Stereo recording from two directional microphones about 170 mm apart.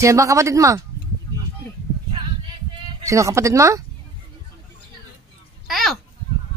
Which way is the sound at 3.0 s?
20° right (ahead or behind).